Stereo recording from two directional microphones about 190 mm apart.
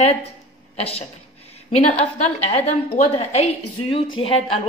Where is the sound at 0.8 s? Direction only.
30° left (ahead or behind).